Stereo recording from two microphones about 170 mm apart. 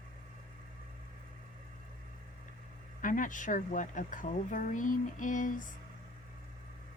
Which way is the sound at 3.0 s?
50° left (ahead or behind).